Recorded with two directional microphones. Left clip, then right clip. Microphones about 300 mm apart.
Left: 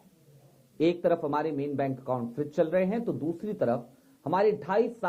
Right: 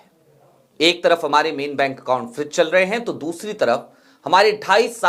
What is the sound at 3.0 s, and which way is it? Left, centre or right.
Speech, right.